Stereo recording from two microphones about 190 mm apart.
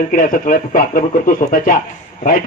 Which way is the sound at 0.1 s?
45° left (ahead or behind).